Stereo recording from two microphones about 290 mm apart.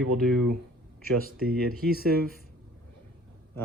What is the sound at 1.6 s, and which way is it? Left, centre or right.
Speech, right.